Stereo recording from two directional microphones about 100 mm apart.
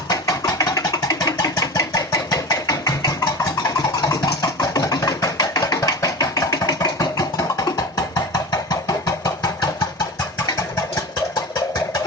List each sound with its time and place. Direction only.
0.1 s engine: 40° left (ahead or behind)
10.8 s engine: 35° left (ahead or behind)